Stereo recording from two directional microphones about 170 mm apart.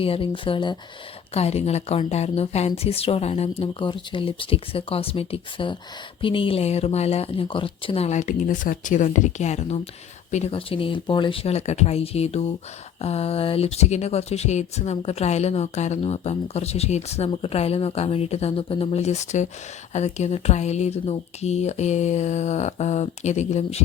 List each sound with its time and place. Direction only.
0.0 s speech: 30° left (ahead or behind)